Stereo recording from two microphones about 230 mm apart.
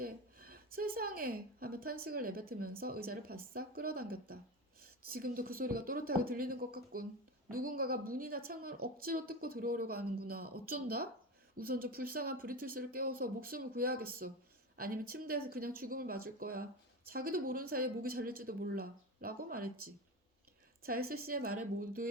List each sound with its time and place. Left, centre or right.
0.0 s a sound: right
2.0 s speech: right
20.8 s speech: right